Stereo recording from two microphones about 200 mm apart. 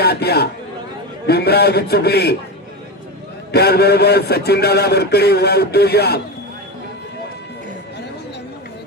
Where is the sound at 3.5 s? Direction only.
50° left (ahead or behind).